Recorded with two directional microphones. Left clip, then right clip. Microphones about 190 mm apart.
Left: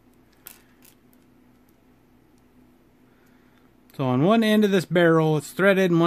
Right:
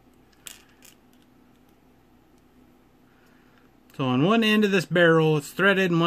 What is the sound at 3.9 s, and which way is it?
Speech, 30° left (ahead or behind).